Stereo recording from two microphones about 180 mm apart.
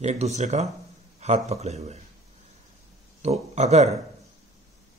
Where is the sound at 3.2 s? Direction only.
35° right (ahead or behind).